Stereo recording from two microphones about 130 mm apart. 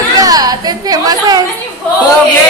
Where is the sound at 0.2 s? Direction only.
30° right (ahead or behind).